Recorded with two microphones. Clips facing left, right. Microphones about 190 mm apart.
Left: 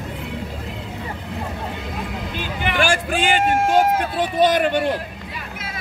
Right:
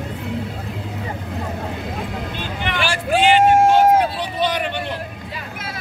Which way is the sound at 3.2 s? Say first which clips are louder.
Right 8 dB; 45° left (ahead or behind).